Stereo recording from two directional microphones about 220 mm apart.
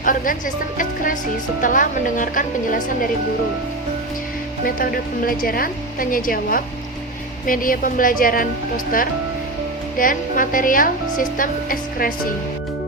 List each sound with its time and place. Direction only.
0.0 s speech: 35° left (ahead or behind)
4.6 s speech: 40° left (ahead or behind)